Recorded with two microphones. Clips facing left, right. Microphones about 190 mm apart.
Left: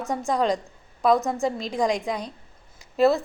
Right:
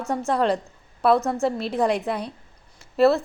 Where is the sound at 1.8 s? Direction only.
5° right (ahead or behind).